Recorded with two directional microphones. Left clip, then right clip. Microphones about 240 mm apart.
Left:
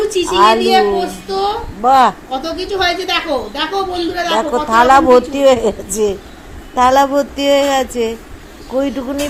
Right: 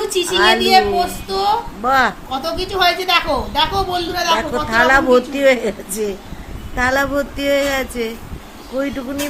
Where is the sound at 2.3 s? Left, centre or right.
Right.